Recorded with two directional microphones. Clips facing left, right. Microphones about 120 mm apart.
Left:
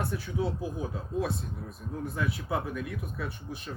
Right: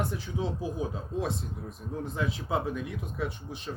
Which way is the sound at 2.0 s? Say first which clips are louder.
Even; 20° right (ahead or behind).